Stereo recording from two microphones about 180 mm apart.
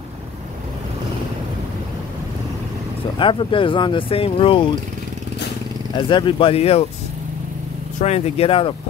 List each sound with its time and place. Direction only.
3.2 s speech: 30° left (ahead or behind)
5.9 s speech: 25° left (ahead or behind)
8.0 s speech: 35° left (ahead or behind)